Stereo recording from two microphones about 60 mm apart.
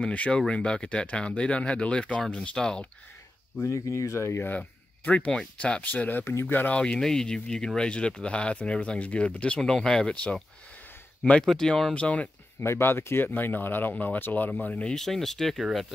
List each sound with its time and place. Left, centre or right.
0.0 s speech: centre
3.6 s speech: left
4.6 s speech: left
6.7 s speech: centre
9.6 s speech: centre
11.4 s speech: centre
11.9 s speech: left
12.5 s speech: left
14.6 s speech: centre
15.0 s speech: centre